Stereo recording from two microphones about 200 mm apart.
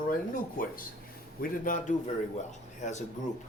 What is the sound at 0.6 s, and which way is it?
Speech, 45° left (ahead or behind).